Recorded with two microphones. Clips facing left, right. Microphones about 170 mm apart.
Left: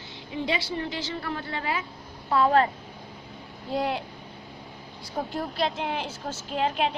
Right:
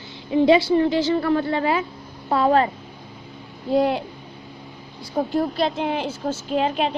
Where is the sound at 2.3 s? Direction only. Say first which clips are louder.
Right 3 dB; 25° right (ahead or behind).